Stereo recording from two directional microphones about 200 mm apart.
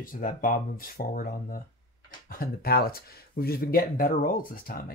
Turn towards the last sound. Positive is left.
turn(degrees=45)  # may be behind; listen again after turning